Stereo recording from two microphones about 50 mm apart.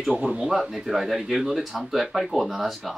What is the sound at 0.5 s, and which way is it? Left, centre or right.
Speech, centre.